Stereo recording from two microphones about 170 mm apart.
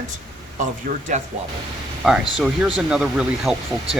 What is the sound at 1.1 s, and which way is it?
Speech, 45° right (ahead or behind).